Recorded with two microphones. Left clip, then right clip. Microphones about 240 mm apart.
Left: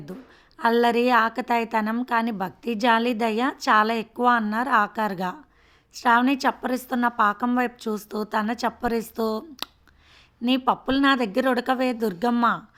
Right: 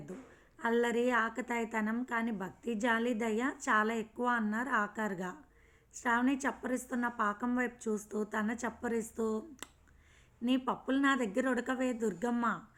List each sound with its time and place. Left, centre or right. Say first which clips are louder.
0.5 s a woman's voice: left 11 dB; left